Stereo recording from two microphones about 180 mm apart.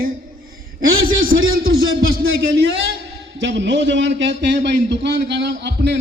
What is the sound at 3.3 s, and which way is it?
A man's voice, 80° right.